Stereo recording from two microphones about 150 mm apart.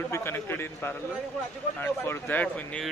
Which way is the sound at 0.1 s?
15° left (ahead or behind).